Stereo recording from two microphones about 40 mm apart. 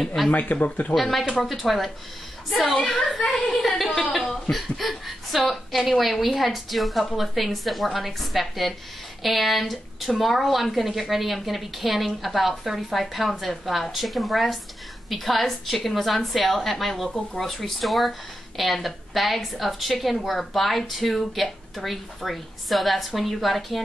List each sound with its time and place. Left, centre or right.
0.0 s a woman's voice: centre
0.3 s speech: left
0.9 s a woman's voice: centre